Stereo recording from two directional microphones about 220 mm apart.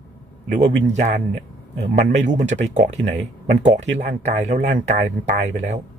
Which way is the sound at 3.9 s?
50° right (ahead or behind).